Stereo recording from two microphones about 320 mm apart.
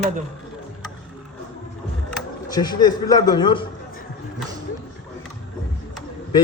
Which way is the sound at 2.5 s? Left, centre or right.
Centre.